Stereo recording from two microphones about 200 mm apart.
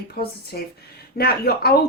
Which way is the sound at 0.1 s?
50° left (ahead or behind).